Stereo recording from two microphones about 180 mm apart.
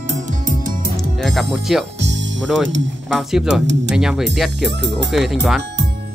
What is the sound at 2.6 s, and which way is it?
Speech, 90° right.